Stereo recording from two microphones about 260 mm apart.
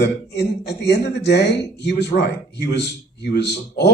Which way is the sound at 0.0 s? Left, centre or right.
Left.